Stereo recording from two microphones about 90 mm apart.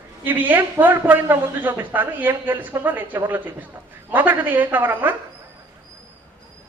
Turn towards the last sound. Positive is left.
turn(degrees=-20)  # may be behind; listen again after turning